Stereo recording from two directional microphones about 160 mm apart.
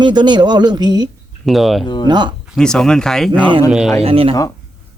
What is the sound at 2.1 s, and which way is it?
Speech, 25° right (ahead or behind).